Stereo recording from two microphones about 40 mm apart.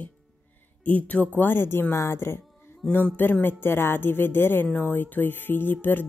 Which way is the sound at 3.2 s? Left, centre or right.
Left.